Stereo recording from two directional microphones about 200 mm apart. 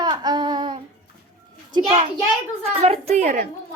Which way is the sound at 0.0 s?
20° right (ahead or behind).